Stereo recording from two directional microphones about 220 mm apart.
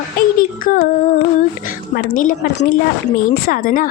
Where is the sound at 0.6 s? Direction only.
40° left (ahead or behind).